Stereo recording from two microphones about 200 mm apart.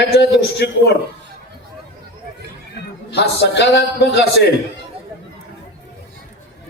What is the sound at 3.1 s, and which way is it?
A man's voice, 60° left (ahead or behind).